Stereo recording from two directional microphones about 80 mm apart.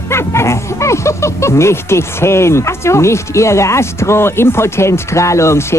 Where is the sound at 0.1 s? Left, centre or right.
Left.